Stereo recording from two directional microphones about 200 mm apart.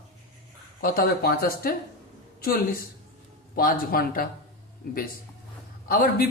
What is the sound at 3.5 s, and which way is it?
Speech, 45° left (ahead or behind).